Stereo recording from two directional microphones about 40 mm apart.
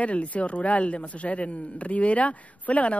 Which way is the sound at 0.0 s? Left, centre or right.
Left.